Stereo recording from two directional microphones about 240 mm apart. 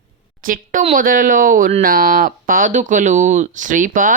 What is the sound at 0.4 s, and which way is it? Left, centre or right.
A woman's voice, right.